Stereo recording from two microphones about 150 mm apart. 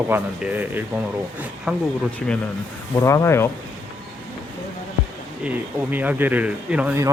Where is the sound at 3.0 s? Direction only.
20° left (ahead or behind).